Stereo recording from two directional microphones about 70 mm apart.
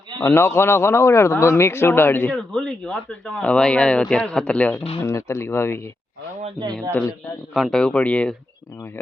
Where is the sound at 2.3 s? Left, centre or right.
Centre.